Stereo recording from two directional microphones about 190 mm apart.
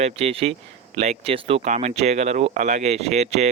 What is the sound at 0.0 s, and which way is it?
Speech, 30° right (ahead or behind).